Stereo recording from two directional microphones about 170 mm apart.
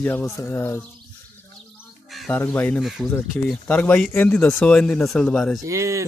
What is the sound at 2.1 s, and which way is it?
Bird, centre (ahead or behind).